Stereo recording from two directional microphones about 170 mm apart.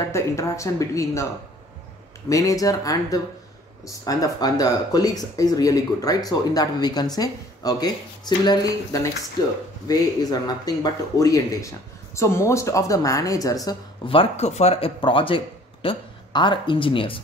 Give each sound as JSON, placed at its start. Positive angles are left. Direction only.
{"t": 0.1, "sound": "speech", "side_deg": 15}
{"t": 2.2, "sound": "speech", "side_deg": 20}